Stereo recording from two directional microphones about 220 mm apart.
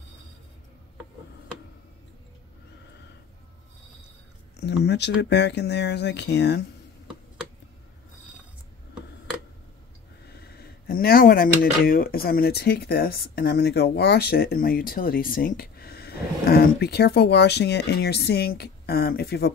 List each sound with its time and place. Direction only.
4.6 s speech: 50° left (ahead or behind)
10.3 s speech: 45° left (ahead or behind)